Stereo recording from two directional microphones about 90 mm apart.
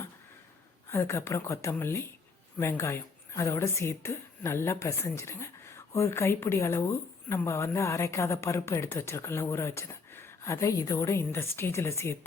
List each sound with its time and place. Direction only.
0.9 s speech: 30° left (ahead or behind)